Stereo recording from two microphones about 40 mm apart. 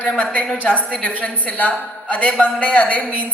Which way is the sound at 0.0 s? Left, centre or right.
Left.